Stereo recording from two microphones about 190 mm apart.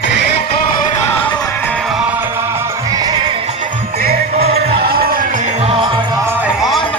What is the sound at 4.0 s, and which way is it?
Music, 55° right (ahead or behind).